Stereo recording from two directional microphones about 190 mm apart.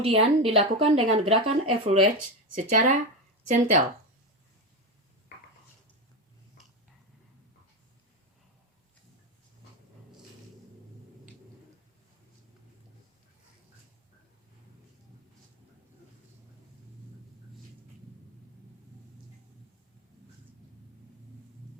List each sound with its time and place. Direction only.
0.0 s speech: 30° right (ahead or behind)